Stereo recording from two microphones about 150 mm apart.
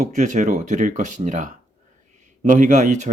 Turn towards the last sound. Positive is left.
turn(degrees=-55)  # may be behind; listen again after turning